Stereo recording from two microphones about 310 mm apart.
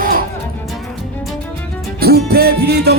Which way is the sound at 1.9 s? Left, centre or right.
Right.